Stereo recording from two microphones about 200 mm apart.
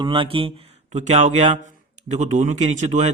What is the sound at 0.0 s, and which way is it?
Speech, 25° right (ahead or behind).